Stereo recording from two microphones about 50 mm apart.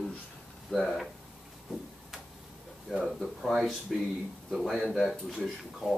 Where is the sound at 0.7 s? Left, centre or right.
Centre.